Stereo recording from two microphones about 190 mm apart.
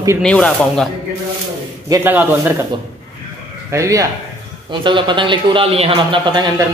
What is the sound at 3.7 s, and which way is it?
A woman's voice, 15° right (ahead or behind).